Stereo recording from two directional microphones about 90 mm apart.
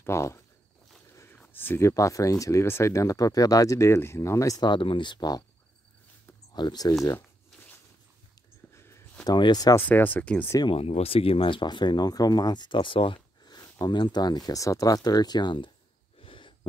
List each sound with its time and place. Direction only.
0.0 s speech: 30° left (ahead or behind)
1.3 s a sound: 20° left (ahead or behind)
1.9 s speech: 35° left (ahead or behind)
4.6 s speech: 60° left (ahead or behind)
6.5 s speech: 55° left (ahead or behind)
8.7 s a sound: 30° left (ahead or behind)
9.2 s speech: 50° left (ahead or behind)
9.8 s speech: 20° left (ahead or behind)
10.7 s speech: 90° left; by 12.7 s 50° left (ahead or behind)
12.7 s speech: 75° left (ahead or behind)
13.5 s a sound: 45° left (ahead or behind)
13.9 s speech: 55° left (ahead or behind)
16.2 s wheeze: 70° left (ahead or behind)